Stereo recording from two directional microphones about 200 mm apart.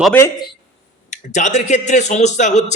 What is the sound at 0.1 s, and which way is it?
Speech, 15° left (ahead or behind).